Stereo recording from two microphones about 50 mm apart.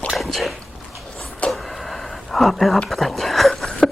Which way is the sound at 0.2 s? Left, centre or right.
Centre.